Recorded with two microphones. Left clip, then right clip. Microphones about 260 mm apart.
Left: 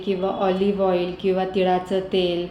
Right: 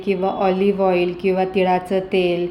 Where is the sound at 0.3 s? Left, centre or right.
Right.